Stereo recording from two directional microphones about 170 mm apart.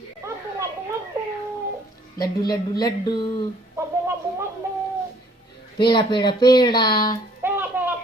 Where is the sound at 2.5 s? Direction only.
25° left (ahead or behind).